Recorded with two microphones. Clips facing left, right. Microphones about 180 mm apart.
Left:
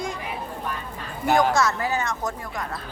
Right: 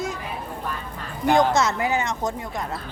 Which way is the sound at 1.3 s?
20° right (ahead or behind).